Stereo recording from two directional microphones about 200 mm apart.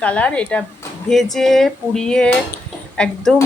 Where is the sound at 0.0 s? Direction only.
5° left (ahead or behind).